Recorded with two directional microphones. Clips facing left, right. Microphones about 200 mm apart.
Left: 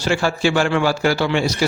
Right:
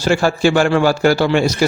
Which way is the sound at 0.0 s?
45° right (ahead or behind).